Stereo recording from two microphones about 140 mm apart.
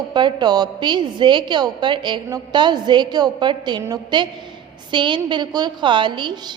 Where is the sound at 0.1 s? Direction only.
30° right (ahead or behind).